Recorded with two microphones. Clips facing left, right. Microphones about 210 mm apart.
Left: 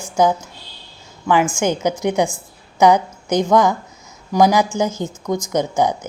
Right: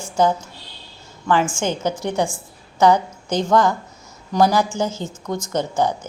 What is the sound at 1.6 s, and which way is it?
A woman's voice, 15° left (ahead or behind).